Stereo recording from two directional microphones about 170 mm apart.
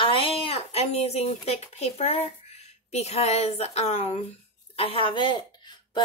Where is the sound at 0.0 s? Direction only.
30° left (ahead or behind).